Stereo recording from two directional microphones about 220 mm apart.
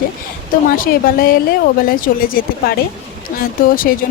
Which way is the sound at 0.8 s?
40° left (ahead or behind).